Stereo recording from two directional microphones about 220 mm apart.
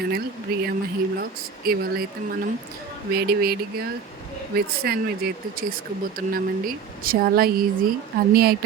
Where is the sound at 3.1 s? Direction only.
45° right (ahead or behind).